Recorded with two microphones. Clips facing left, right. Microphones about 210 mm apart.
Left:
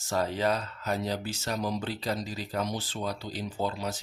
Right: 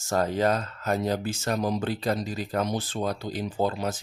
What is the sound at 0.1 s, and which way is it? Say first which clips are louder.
Speech: right 4 dB; 45° right (ahead or behind).